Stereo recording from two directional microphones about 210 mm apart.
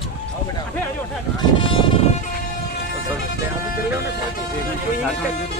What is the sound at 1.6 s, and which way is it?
Vehicle, 25° left (ahead or behind).